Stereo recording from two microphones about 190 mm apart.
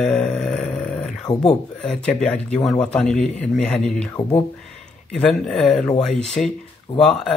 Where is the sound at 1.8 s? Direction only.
5° left (ahead or behind).